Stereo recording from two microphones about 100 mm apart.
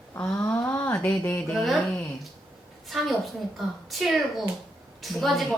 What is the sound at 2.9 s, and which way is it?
A woman's voice, centre (ahead or behind).